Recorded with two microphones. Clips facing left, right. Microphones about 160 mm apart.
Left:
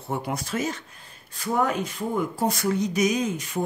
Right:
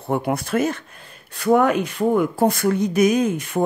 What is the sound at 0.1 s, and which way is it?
Speech, 60° right (ahead or behind).